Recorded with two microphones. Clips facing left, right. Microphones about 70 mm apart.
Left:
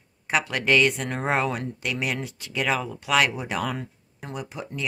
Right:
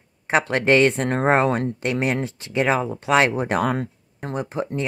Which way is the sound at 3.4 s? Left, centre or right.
Right.